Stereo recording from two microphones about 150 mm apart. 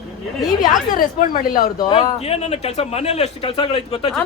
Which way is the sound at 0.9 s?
70° left (ahead or behind).